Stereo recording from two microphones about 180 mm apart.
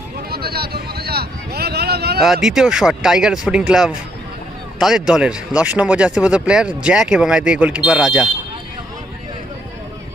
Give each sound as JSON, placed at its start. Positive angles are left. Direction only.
{"t": 0.3, "sound": "vehicle", "side_deg": -60}
{"t": 2.2, "sound": "speech", "side_deg": -5}